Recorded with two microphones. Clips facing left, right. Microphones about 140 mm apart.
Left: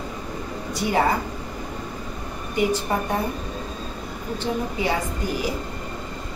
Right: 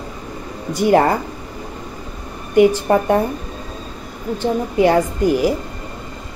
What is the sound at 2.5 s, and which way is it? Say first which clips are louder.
Speech: right 10 dB; 65° right (ahead or behind).